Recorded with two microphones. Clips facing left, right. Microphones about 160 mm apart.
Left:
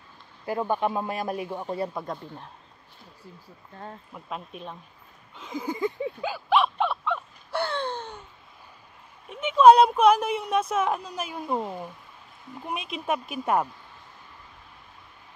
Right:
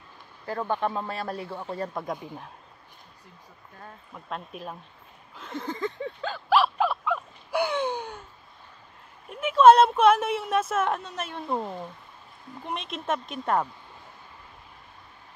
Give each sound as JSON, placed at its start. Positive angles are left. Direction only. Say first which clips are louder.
{"t": 0.5, "sound": "speech", "louder": "left 2 dB", "side_deg": 15}
{"t": 2.0, "sound": "speech", "louder": "right 2 dB", "side_deg": -10}
{"t": 4.1, "sound": "speech", "louder": "right 3 dB", "side_deg": 0}
{"t": 6.5, "sound": "crow", "louder": "right 1 dB", "side_deg": 0}
{"t": 7.5, "sound": "a sound", "louder": "right 3 dB", "side_deg": -15}
{"t": 9.3, "sound": "speech", "louder": "left 1 dB", "side_deg": 0}